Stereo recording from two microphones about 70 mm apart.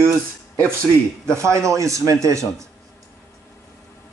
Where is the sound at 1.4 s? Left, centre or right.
Right.